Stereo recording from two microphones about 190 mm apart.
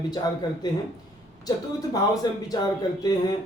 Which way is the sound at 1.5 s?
20° left (ahead or behind).